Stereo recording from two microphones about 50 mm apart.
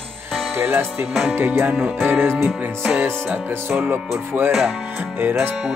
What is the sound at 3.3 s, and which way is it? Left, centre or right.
Speech, right.